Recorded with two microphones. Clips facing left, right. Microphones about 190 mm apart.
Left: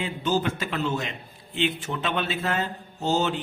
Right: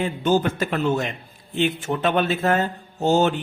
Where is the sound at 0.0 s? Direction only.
50° right (ahead or behind).